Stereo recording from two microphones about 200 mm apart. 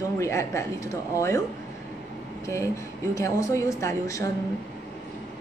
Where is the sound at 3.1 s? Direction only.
15° left (ahead or behind).